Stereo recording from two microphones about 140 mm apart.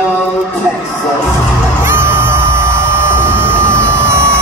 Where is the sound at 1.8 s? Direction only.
15° right (ahead or behind).